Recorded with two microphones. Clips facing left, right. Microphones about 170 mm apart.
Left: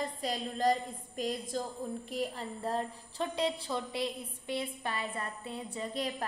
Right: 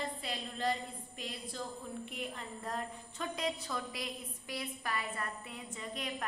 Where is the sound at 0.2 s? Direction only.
40° left (ahead or behind).